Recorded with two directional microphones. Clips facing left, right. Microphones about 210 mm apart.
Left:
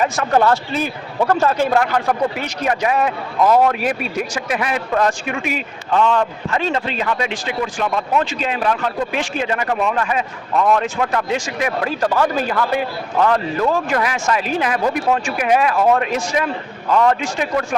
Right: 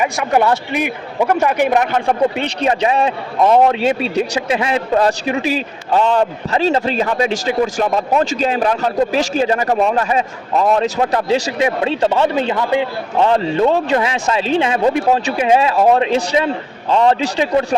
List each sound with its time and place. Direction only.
0.0 s a man's voice: 15° right (ahead or behind); by 17.6 s 30° right (ahead or behind)